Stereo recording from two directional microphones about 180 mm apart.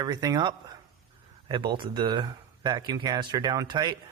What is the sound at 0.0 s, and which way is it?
Speech, 20° right (ahead or behind).